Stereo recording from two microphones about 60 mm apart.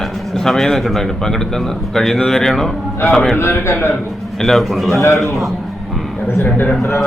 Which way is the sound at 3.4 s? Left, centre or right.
Left.